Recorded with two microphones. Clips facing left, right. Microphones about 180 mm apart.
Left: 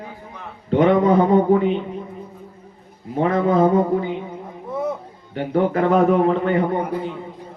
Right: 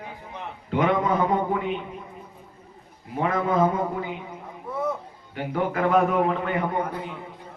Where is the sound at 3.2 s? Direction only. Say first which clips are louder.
Left 5 dB; 30° left (ahead or behind).